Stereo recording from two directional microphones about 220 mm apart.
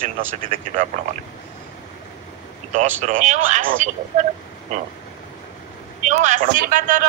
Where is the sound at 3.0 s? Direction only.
35° right (ahead or behind).